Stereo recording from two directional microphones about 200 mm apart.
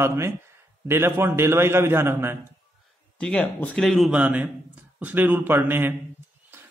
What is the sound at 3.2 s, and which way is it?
A man's voice, 5° left (ahead or behind).